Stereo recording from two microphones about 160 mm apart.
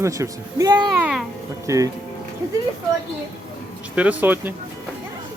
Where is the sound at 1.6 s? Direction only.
20° right (ahead or behind).